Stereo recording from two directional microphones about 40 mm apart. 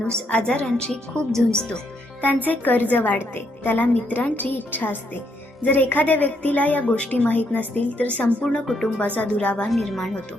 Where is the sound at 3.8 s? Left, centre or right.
Left.